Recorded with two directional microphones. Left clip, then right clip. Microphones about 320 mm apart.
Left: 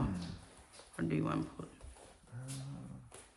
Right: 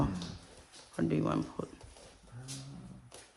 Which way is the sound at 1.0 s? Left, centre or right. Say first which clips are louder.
Right 4 dB; centre.